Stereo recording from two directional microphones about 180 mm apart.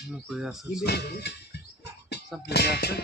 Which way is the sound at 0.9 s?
65° left (ahead or behind).